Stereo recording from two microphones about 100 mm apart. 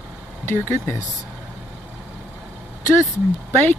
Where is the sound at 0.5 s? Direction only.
25° left (ahead or behind).